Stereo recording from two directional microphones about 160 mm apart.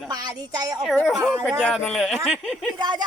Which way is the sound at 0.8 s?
Centre (ahead or behind).